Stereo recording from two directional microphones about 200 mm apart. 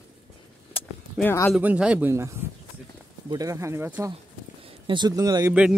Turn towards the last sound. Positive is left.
turn(degrees=-20)  # may be behind; listen again after turning